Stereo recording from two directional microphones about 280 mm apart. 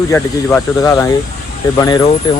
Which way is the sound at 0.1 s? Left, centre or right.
Centre.